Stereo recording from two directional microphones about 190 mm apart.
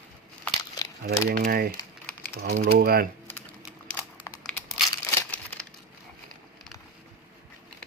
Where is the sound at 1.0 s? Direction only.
50° right (ahead or behind).